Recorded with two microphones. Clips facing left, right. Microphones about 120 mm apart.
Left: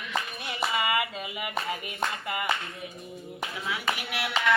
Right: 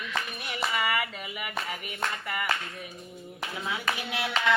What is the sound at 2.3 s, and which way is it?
Clapping, 20° left (ahead or behind).